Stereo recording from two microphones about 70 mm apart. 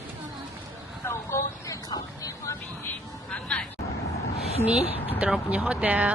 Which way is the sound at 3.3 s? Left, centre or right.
Centre.